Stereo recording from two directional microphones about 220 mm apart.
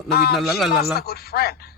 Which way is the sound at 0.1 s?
45° left (ahead or behind).